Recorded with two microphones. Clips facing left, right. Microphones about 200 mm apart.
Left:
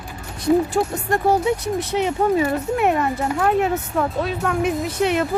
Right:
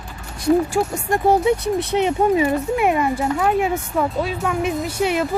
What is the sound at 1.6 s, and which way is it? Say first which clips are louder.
Speech: right 2 dB; 60° right (ahead or behind).